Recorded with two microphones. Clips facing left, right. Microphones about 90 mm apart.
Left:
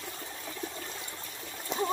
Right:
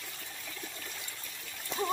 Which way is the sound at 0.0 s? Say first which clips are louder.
Left 5 dB; 30° left (ahead or behind).